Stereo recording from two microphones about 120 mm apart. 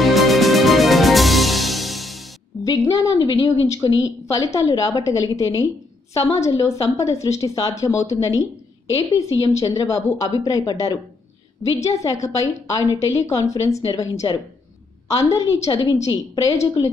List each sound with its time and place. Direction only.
0.0 s music: centre (ahead or behind)
2.6 s a woman's voice: 30° left (ahead or behind)
16.8 s a woman's voice: 40° left (ahead or behind)